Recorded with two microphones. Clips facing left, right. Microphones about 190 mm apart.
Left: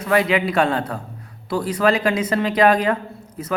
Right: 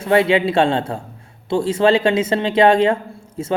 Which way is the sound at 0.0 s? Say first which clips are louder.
Right 3 dB; 25° right (ahead or behind).